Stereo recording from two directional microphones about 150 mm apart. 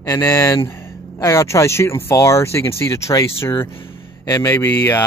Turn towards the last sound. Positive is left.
turn(degrees=15)  # may be behind; listen again after turning